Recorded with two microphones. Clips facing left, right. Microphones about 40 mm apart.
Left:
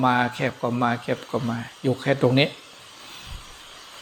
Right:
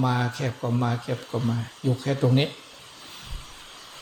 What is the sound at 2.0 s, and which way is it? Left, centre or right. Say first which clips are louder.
Speech: left 5 dB; left.